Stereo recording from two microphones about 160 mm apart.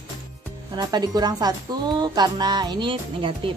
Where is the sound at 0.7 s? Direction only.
25° right (ahead or behind).